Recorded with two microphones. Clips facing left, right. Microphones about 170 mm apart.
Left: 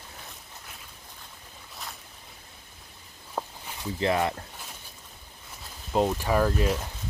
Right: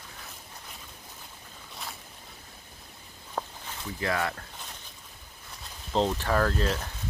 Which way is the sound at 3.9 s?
20° left (ahead or behind).